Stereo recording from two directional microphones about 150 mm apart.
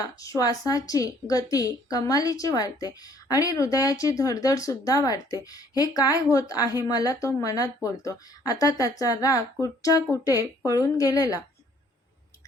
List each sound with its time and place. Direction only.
0.2 s a woman's voice: 25° left (ahead or behind)